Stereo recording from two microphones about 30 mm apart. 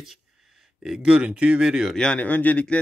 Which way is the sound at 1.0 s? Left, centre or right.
Right.